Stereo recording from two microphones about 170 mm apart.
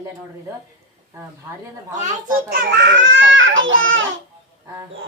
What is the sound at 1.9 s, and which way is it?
A child's voice, 50° right (ahead or behind).